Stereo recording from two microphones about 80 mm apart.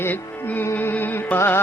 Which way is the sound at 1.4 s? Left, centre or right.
Left.